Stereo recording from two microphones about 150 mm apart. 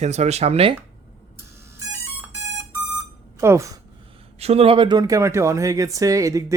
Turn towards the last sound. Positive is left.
turn(degrees=-20)  # may be behind; listen again after turning